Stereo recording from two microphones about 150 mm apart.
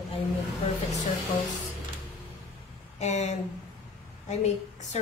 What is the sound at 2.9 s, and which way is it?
A woman's voice, 50° left (ahead or behind).